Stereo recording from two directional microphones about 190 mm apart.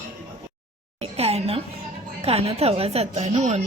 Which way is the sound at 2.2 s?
30° right (ahead or behind).